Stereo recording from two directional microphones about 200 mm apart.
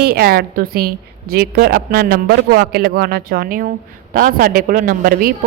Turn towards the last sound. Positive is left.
turn(degrees=-45)  # may be behind; listen again after turning